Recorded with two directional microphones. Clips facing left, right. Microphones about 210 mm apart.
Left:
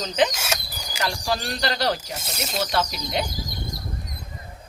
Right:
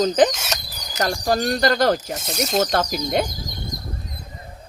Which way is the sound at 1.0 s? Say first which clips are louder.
Right 6 dB; 45° right (ahead or behind).